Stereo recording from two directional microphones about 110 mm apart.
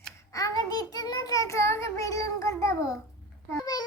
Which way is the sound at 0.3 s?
30° left (ahead or behind).